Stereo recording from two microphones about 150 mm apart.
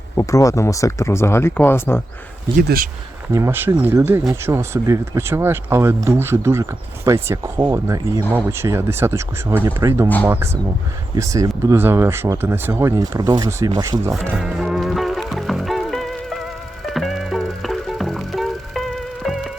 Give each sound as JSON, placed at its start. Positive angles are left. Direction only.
{"t": 0.2, "sound": "speech", "side_deg": 20}
{"t": 2.6, "sound": "speech", "side_deg": -75}
{"t": 3.3, "sound": "speech", "side_deg": -15}
{"t": 14.1, "sound": "music", "side_deg": -5}